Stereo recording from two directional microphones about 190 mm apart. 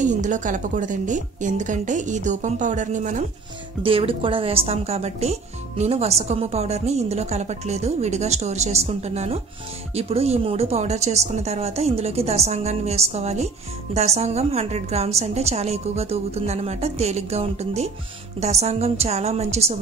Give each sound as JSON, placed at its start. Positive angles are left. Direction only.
{"t": 0.0, "sound": "speech", "side_deg": -40}
{"t": 3.8, "sound": "speech", "side_deg": -30}